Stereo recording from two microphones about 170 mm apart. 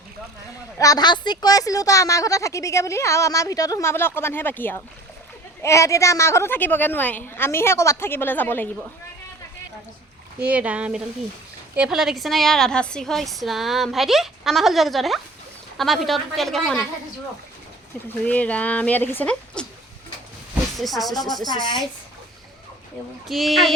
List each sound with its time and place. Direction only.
0.8 s a woman's voice: 20° left (ahead or behind)
10.4 s a woman's voice: 10° right (ahead or behind)
18.3 s a woman's voice: 10° left (ahead or behind)
20.7 s a woman's voice: centre (ahead or behind)
21.4 s a woman's voice: 25° left (ahead or behind)
23.3 s a woman's voice: centre (ahead or behind)